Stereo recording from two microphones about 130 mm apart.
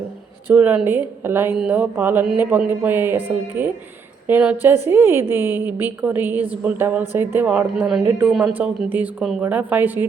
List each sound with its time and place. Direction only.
0.5 s a woman's voice: 10° right (ahead or behind)